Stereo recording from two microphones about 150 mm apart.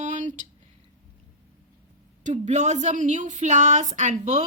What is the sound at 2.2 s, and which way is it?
Speech, 55° right (ahead or behind).